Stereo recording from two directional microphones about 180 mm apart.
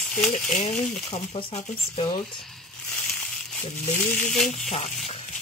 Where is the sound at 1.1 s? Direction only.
35° left (ahead or behind).